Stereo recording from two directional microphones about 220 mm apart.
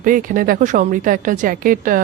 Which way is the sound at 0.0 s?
40° right (ahead or behind).